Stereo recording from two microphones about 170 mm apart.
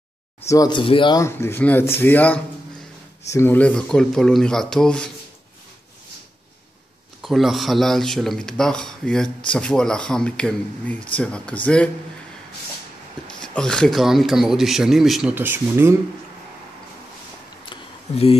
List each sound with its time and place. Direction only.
0.5 s speech: 25° left (ahead or behind)
1.2 s speech: 15° left (ahead or behind)
7.2 s speech: centre (ahead or behind)
13.3 s speech: 5° left (ahead or behind)
15.3 s speech: 10° right (ahead or behind)
17.6 s a sound: 35° left (ahead or behind)